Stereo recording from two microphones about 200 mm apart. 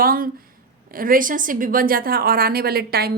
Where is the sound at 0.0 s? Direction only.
45° right (ahead or behind).